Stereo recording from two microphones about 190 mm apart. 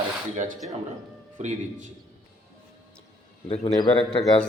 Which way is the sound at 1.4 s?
40° right (ahead or behind).